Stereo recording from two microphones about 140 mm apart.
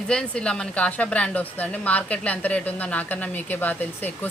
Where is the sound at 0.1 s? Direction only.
5° left (ahead or behind).